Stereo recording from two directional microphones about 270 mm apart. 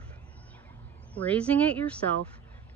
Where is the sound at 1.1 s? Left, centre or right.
Centre.